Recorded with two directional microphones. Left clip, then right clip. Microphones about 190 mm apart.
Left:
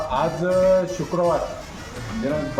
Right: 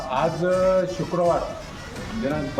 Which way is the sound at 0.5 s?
Centre (ahead or behind).